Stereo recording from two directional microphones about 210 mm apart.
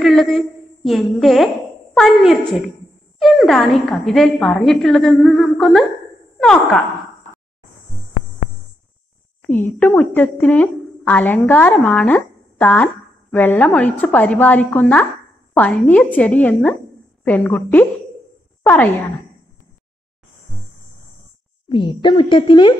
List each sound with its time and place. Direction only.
0.0 s a sound: centre (ahead or behind)
2.0 s a woman's voice: centre (ahead or behind)
9.4 s a woman's voice: 10° left (ahead or behind)
21.6 s speech: 25° left (ahead or behind)